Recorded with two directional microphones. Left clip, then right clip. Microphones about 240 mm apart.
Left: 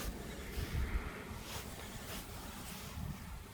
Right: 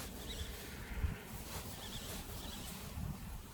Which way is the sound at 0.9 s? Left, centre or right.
Left.